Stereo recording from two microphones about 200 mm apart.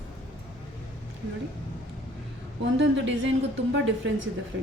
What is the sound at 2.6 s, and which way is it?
A woman's voice, 65° right (ahead or behind).